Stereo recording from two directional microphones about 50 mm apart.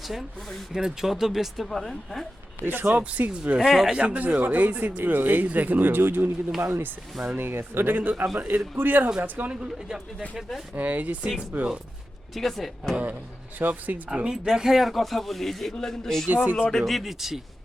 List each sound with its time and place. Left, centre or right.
0.1 s a man's voice: centre
0.7 s a man's voice: centre
2.6 s speech: right
3.0 s speech: right
3.6 s a man's voice: centre
3.9 s speech: right
9.5 s speech: centre
10.8 s speech: right
12.3 s a man's voice: centre
13.6 s speech: right
14.3 s a man's voice: centre
16.3 s speech: right
16.6 s a man's voice: centre